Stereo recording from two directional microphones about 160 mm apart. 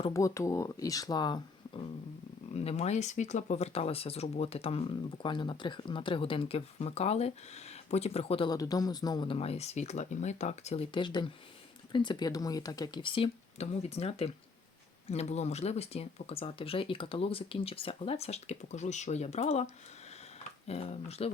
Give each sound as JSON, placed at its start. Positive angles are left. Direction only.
{"t": 0.1, "sound": "speech", "side_deg": 20}
{"t": 2.5, "sound": "speech", "side_deg": 40}
{"t": 8.4, "sound": "speech", "side_deg": 25}
{"t": 10.9, "sound": "speech", "side_deg": 30}